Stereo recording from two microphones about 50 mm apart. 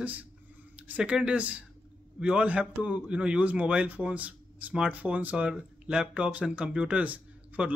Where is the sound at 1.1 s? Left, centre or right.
Right.